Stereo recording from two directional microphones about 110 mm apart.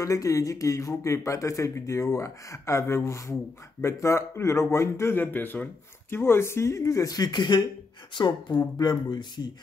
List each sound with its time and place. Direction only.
0.0 s speech: 30° left (ahead or behind)